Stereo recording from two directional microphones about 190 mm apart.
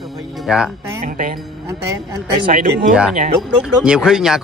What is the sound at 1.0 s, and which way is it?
Speech, 45° right (ahead or behind).